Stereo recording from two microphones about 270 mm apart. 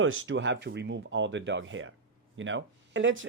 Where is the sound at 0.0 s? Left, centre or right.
Right.